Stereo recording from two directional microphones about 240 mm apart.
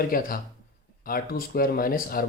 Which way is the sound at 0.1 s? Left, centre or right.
Left.